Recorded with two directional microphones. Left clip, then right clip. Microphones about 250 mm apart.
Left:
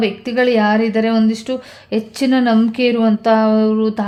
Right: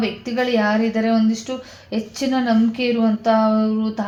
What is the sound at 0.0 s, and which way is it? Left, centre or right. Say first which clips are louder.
Speech: left 6 dB; left.